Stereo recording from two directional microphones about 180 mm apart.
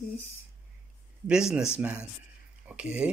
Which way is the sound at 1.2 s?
5° right (ahead or behind).